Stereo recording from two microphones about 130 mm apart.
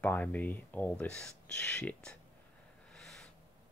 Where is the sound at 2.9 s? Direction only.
5° left (ahead or behind).